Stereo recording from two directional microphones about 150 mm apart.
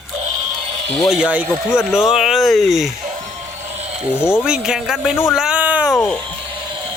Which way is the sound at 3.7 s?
45° right (ahead or behind).